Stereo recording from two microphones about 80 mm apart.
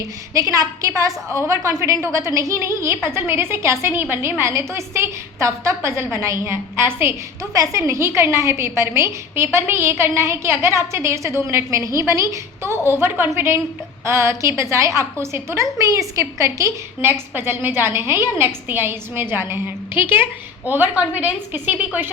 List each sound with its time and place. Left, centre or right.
0.3 s a woman's voice: right
7.5 s a woman's voice: right